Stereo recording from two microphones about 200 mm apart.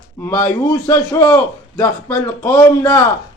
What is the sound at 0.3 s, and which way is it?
A man's voice, 15° left (ahead or behind).